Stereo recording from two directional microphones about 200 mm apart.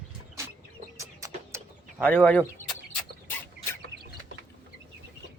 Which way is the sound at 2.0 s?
5° left (ahead or behind).